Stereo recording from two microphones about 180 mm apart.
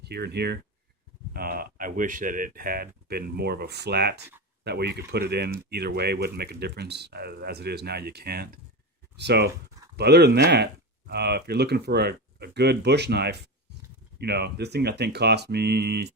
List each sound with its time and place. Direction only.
0.0 s speech: 65° right (ahead or behind)
1.3 s speech: 55° right (ahead or behind)